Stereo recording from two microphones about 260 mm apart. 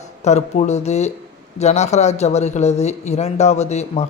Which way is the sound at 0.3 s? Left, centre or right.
Left.